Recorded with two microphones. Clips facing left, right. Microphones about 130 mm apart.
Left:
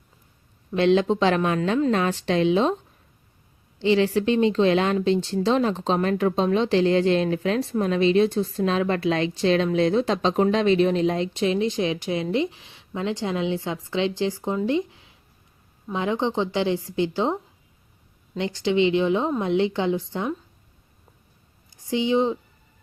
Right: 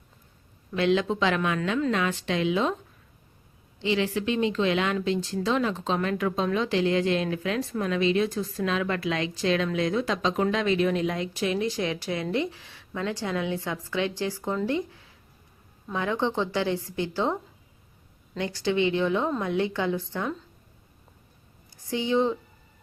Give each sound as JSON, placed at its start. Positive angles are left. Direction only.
{"t": 0.7, "sound": "a woman's voice", "side_deg": 30}
{"t": 3.8, "sound": "speech", "side_deg": 35}
{"t": 21.8, "sound": "speech", "side_deg": 20}